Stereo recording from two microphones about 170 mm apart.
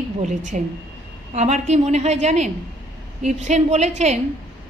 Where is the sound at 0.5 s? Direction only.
45° right (ahead or behind).